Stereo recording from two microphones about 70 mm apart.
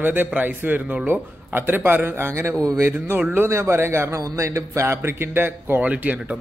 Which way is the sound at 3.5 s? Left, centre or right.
Right.